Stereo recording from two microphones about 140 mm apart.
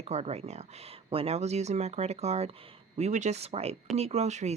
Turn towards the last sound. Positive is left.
turn(degrees=-55)  # may be behind; listen again after turning